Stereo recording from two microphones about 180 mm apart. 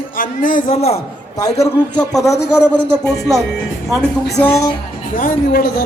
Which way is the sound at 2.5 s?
10° left (ahead or behind).